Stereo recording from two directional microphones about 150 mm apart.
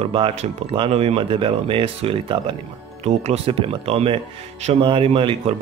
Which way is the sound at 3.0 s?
45° right (ahead or behind).